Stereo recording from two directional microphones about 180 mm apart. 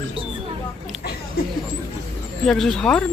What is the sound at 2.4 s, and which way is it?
Speech, centre (ahead or behind).